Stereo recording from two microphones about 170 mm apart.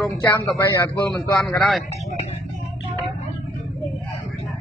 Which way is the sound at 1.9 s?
40° left (ahead or behind).